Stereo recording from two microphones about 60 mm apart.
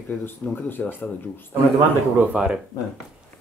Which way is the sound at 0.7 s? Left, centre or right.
Left.